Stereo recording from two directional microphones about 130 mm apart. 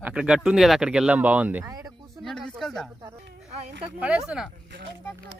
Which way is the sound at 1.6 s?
25° right (ahead or behind).